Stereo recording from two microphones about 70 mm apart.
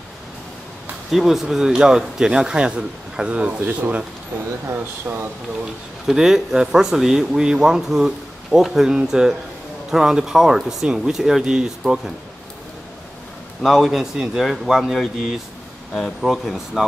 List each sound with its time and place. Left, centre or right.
1.1 s speech: centre
4.6 s speech: right
6.0 s speech: centre
13.6 s speech: centre